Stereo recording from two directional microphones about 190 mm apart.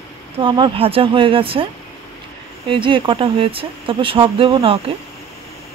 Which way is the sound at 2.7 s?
25° right (ahead or behind).